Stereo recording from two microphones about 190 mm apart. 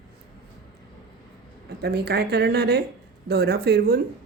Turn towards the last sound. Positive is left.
turn(degrees=-55)  # may be behind; listen again after turning